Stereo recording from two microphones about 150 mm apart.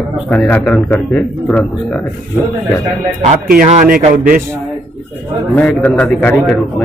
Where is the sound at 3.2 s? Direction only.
60° right (ahead or behind).